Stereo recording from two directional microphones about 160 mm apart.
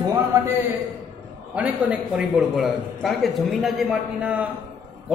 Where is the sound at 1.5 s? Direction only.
10° right (ahead or behind).